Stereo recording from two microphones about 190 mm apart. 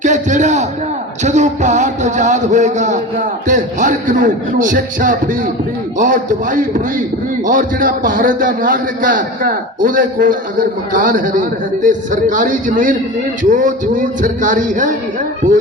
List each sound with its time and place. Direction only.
0.0 s a man's voice: 40° right (ahead or behind)